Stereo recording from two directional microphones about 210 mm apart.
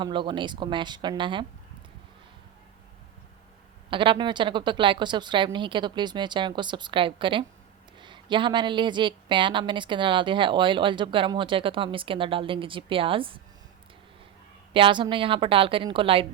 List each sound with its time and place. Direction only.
0.0 s a woman's voice: 20° right (ahead or behind)
3.8 s a woman's voice: 25° right (ahead or behind)
14.7 s a woman's voice: 25° right (ahead or behind)